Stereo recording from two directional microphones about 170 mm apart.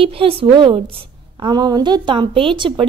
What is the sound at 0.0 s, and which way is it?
A woman's voice, 30° right (ahead or behind).